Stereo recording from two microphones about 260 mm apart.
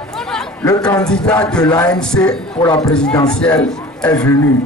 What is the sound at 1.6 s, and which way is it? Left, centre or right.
Speech, centre.